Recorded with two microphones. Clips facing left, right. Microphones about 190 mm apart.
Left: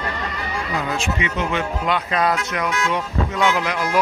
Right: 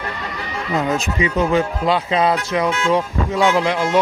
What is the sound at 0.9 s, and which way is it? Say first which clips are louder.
Speech: right 4 dB; 35° right (ahead or behind).